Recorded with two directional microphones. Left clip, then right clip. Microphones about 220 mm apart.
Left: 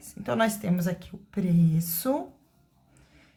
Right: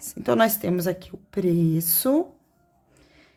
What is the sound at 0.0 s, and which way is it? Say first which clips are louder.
A woman's voice: right 6 dB; 45° right (ahead or behind).